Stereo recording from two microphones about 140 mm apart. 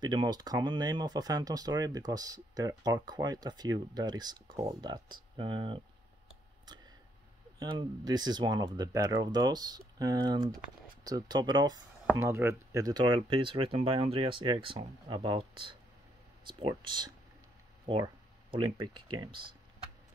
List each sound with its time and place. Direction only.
0.0 s speech: 30° right (ahead or behind)
7.5 s speech: 30° right (ahead or behind)
12.2 s speech: 20° right (ahead or behind); by 19.4 s 35° right (ahead or behind)